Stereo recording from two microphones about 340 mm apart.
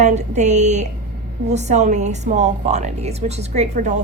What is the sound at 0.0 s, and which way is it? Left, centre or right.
Speech, centre.